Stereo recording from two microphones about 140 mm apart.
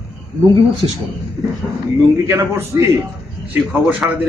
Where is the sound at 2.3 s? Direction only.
15° right (ahead or behind).